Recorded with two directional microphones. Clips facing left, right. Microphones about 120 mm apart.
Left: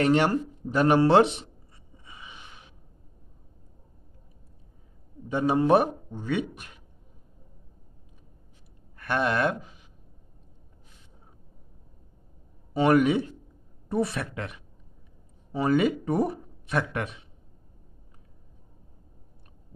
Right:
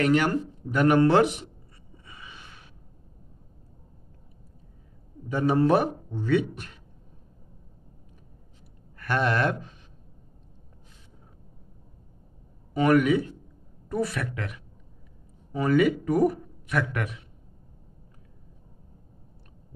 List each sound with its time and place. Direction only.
0.0 s speech: 30° left (ahead or behind)
2.0 s gasp: 20° left (ahead or behind)
5.3 s speech: 20° left (ahead or behind)
8.9 s a sound: 20° left (ahead or behind)
12.7 s speech: 30° left (ahead or behind)